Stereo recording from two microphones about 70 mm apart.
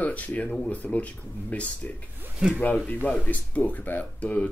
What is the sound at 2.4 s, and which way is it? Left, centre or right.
Speech, centre.